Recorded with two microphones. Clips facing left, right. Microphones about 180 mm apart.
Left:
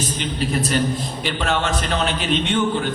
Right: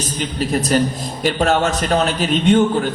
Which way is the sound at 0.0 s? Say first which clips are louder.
Right 2 dB; 40° right (ahead or behind).